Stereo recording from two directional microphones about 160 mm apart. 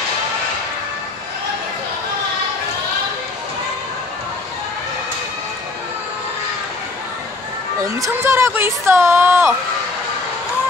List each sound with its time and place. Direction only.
7.8 s speech: 20° right (ahead or behind)